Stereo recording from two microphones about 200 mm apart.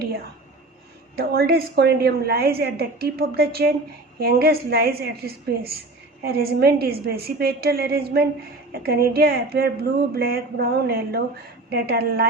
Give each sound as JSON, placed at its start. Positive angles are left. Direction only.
{"t": 1.1, "sound": "a woman's voice", "side_deg": -50}